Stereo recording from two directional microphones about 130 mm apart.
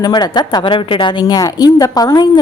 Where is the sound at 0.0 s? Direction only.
30° left (ahead or behind).